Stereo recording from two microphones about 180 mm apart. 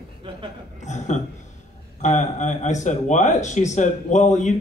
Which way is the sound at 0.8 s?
40° left (ahead or behind).